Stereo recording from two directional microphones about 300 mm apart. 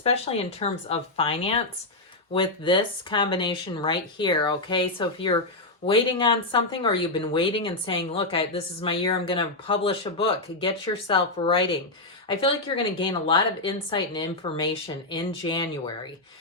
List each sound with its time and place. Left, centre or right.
0.0 s speech: centre